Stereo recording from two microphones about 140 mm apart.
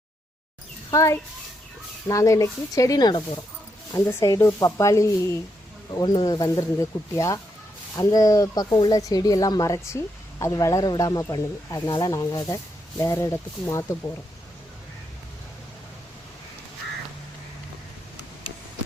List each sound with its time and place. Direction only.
0.9 s a child's voice: 20° left (ahead or behind)
3.9 s speech: 20° left (ahead or behind)